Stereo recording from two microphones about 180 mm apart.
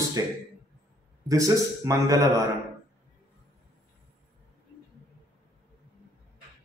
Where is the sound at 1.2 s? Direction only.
20° right (ahead or behind).